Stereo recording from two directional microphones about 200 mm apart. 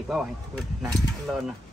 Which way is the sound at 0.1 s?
Centre (ahead or behind).